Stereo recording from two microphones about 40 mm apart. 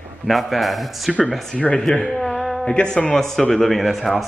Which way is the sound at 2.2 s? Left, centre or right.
Centre.